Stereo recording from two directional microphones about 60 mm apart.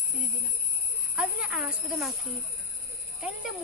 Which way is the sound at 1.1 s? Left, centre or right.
Centre.